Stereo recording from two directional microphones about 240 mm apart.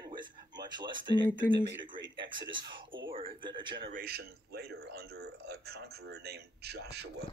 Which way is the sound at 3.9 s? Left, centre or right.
Right.